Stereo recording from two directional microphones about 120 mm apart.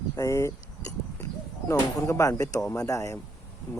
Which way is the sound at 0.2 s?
25° left (ahead or behind).